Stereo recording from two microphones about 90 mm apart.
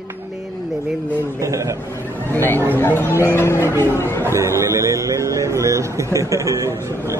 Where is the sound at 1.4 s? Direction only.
35° right (ahead or behind).